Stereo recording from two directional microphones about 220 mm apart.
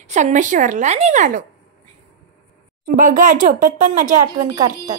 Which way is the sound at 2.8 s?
40° right (ahead or behind).